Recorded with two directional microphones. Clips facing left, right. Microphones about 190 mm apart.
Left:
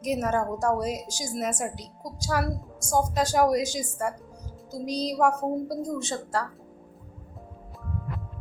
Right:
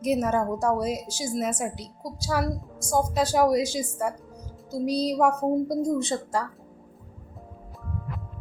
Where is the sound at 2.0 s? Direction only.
15° left (ahead or behind).